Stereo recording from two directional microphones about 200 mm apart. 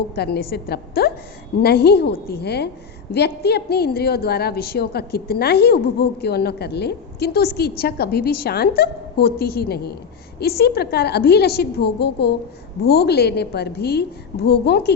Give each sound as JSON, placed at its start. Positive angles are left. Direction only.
{"t": 0.2, "sound": "a woman's voice", "side_deg": 55}